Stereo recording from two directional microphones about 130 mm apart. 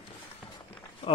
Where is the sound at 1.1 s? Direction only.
45° left (ahead or behind).